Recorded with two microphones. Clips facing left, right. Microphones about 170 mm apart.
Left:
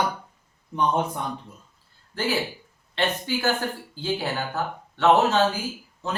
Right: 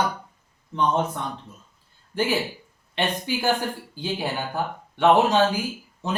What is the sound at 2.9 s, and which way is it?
Speech, 15° right (ahead or behind).